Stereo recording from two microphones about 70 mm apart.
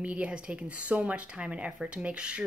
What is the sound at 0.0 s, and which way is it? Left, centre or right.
Speech, centre.